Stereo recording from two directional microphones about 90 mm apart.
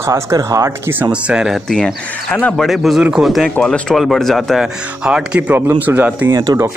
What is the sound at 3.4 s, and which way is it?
Speech, 10° left (ahead or behind).